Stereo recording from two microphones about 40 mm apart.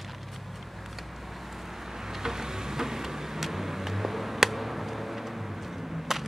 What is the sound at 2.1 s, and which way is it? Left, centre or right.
Vehicle, centre.